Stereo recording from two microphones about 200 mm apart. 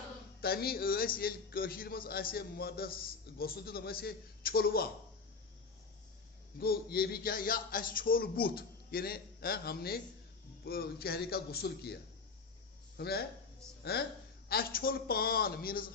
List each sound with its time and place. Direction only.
0.4 s a man's voice: 50° left (ahead or behind)
6.6 s a man's voice: 50° left (ahead or behind)
13.0 s a man's voice: 50° left (ahead or behind)